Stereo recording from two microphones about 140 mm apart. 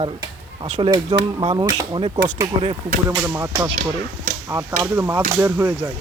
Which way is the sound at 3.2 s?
15° right (ahead or behind).